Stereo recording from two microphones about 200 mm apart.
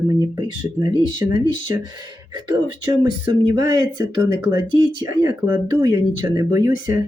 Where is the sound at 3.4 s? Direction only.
20° right (ahead or behind).